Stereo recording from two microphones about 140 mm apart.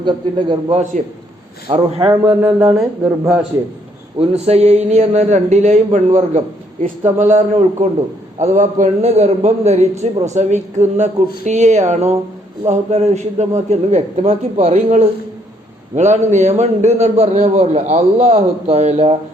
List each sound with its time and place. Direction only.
0.0 s a man's voice: 35° right (ahead or behind)
2.4 s speech: 15° right (ahead or behind)
4.2 s a man's voice: 45° right (ahead or behind)
6.8 s a man's voice: 60° right (ahead or behind)